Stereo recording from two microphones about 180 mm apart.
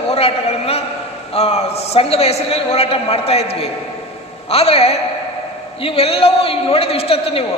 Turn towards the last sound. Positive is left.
turn(degrees=30)  # may be behind; listen again after turning